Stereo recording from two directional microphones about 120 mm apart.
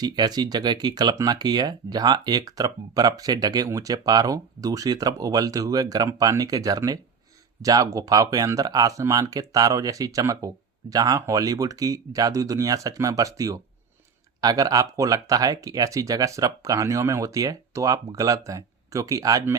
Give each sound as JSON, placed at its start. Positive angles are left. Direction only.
{"t": 0.0, "sound": "speech", "side_deg": -35}